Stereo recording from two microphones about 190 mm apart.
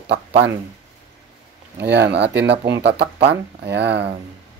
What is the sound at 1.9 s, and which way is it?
Speech, 65° right (ahead or behind).